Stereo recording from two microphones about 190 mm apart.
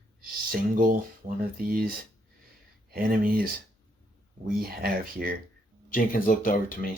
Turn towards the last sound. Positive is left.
turn(degrees=45)  # may be behind; listen again after turning